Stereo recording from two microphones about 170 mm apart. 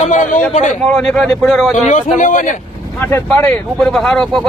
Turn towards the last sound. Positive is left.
turn(degrees=5)  # may be behind; listen again after turning